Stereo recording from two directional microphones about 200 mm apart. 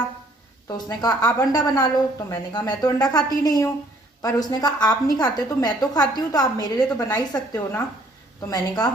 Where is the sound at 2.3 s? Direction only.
20° left (ahead or behind).